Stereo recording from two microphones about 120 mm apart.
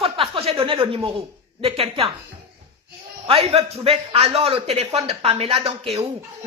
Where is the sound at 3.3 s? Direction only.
55° right (ahead or behind).